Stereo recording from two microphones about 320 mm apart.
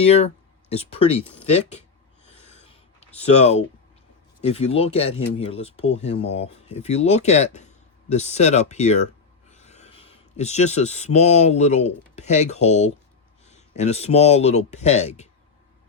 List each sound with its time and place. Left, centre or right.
0.0 s speech: centre
2.2 s snort: centre
3.2 s speech: centre